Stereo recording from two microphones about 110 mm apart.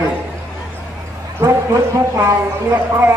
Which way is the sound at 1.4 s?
30° right (ahead or behind).